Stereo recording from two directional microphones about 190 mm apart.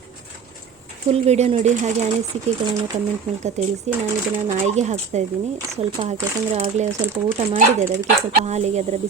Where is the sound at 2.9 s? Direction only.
40° right (ahead or behind).